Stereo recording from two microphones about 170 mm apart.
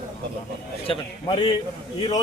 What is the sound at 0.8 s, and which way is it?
Speech, 30° left (ahead or behind).